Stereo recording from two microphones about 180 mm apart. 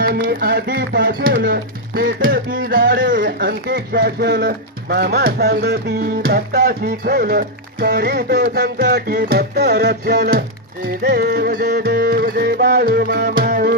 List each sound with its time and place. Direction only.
0.0 s speech: 60° right (ahead or behind)